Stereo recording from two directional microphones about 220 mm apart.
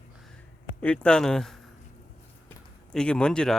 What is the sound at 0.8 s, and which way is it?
Speech, 5° left (ahead or behind).